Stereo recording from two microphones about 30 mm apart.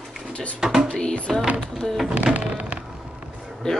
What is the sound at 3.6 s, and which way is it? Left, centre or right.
Speech, left.